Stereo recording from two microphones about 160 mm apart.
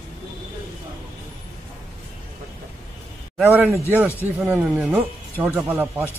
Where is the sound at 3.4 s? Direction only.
15° right (ahead or behind).